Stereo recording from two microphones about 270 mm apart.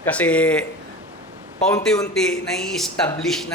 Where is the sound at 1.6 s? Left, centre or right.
Centre.